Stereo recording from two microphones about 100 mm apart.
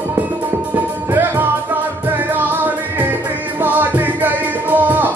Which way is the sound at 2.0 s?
20° right (ahead or behind).